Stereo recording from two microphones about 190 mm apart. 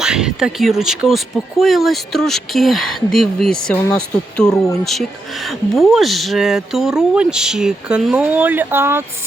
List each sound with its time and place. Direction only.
0.0 s speech: 5° right (ahead or behind)
4.4 s speech: 15° left (ahead or behind)
5.5 s speech: centre (ahead or behind)